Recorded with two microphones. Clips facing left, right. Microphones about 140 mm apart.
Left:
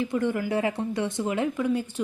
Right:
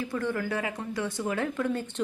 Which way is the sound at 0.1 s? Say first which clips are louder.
Left 4 dB; 20° left (ahead or behind).